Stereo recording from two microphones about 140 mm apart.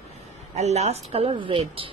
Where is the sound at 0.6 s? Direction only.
50° right (ahead or behind).